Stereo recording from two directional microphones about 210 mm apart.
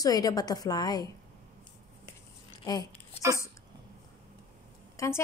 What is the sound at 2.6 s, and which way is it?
Speech, 20° left (ahead or behind).